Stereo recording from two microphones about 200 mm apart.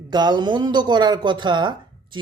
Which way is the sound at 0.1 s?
20° right (ahead or behind).